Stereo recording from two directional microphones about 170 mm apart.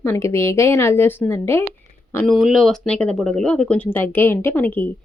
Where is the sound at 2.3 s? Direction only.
Centre (ahead or behind).